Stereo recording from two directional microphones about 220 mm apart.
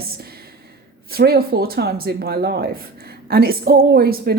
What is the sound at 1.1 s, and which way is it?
A woman's voice, 45° right (ahead or behind).